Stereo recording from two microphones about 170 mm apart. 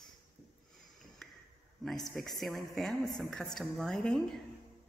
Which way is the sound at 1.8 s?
Centre (ahead or behind).